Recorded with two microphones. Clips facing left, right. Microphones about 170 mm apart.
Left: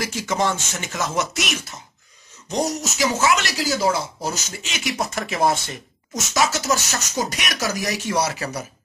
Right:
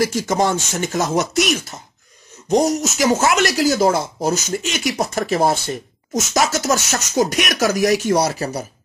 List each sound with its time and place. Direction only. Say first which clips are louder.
0.0 s speech: right 5 dB; 45° right (ahead or behind)
4.9 s speech: right 5 dB; 35° right (ahead or behind)